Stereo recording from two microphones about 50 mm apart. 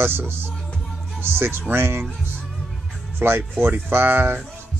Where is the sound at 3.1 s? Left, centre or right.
Right.